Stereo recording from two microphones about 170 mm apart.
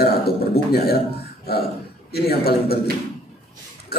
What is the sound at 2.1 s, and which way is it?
Speech, 65° left (ahead or behind).